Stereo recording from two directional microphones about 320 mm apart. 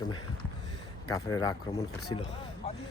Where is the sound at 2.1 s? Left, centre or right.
Centre.